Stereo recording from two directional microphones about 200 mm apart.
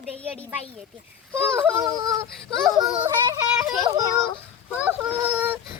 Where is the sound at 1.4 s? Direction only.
10° right (ahead or behind).